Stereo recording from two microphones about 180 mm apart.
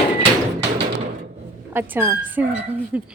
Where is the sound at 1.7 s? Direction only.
10° right (ahead or behind).